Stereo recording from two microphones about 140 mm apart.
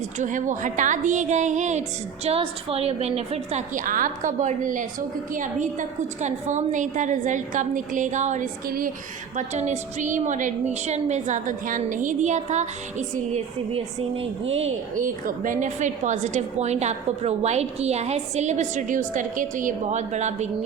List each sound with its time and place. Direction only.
0.2 s a woman's voice: 65° right (ahead or behind)
2.2 s a woman's voice: 45° right (ahead or behind); by 8.9 s 90° right
9.3 s a woman's voice: 55° right (ahead or behind)
14.9 s a woman's voice: 70° right (ahead or behind)